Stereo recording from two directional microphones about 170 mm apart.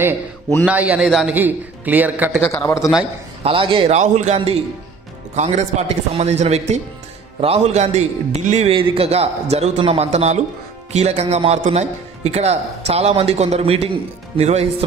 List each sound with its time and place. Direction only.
0.7 s a man's voice: 5° right (ahead or behind)
2.5 s a man's voice: 15° left (ahead or behind)
3.4 s a man's voice: 30° right (ahead or behind)